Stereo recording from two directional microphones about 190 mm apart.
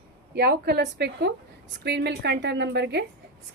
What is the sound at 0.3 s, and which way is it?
A woman's voice, 60° right (ahead or behind).